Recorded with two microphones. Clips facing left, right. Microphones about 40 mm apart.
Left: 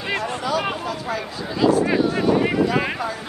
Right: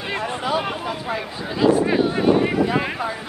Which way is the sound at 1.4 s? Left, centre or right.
Centre.